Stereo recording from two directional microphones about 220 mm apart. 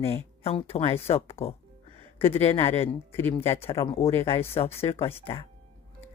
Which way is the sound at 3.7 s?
20° left (ahead or behind).